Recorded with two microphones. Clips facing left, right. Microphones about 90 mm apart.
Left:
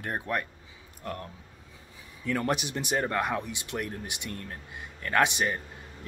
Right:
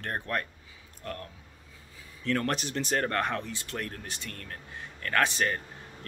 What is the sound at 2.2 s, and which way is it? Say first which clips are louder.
Speech: left 1 dB; 10° left (ahead or behind).